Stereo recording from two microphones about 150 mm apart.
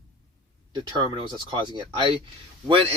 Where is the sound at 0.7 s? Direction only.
30° right (ahead or behind).